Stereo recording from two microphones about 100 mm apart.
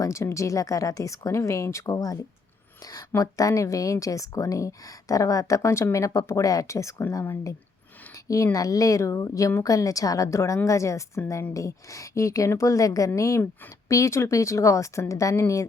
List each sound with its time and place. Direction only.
0.0 s a woman's voice: 30° left (ahead or behind)
3.2 s a woman's voice: 35° left (ahead or behind)
8.5 s a woman's voice: 35° left (ahead or behind)